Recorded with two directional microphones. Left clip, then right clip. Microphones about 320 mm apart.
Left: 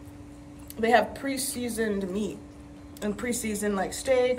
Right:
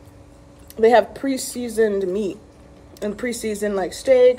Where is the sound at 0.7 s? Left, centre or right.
Centre.